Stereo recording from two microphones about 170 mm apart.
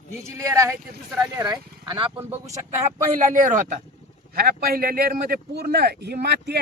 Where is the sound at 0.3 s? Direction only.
20° right (ahead or behind).